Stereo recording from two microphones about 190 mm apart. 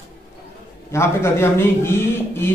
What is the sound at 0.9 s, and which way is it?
Speech, 15° left (ahead or behind).